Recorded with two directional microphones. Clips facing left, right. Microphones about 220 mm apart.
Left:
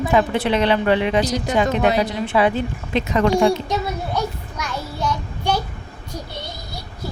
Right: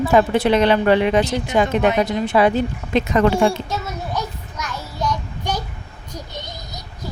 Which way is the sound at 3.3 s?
15° left (ahead or behind).